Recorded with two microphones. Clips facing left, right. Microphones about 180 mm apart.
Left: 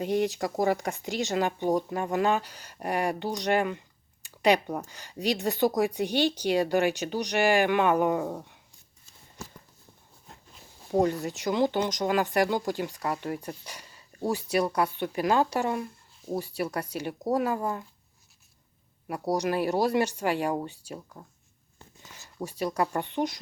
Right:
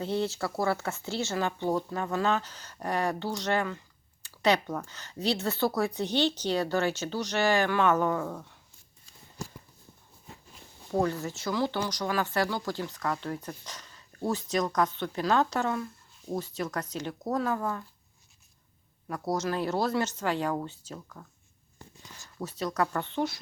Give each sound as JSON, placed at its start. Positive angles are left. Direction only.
{"t": 0.0, "sound": "speech", "side_deg": 15}
{"t": 10.9, "sound": "speech", "side_deg": 15}
{"t": 19.0, "sound": "speech", "side_deg": 15}
{"t": 22.2, "sound": "speech", "side_deg": 15}